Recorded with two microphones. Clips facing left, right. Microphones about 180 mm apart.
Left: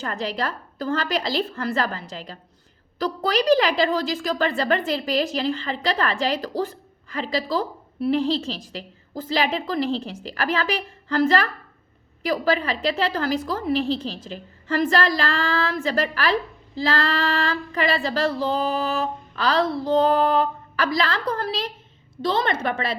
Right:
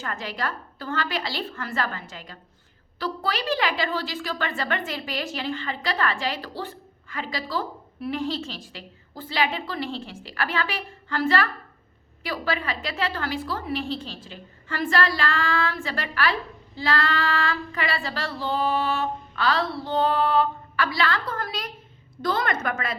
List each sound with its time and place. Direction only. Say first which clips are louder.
0.0 s a woman's voice: left 4 dB; 35° left (ahead or behind)